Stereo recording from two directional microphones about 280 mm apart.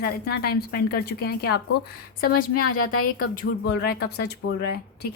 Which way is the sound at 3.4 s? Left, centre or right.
Left.